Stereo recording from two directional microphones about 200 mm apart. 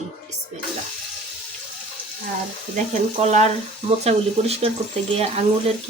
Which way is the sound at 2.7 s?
35° right (ahead or behind).